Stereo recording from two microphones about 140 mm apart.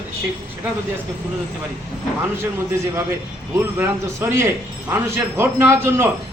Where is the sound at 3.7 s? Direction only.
20° right (ahead or behind).